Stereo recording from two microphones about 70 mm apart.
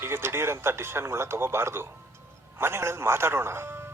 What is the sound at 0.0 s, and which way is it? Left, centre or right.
Speech, right.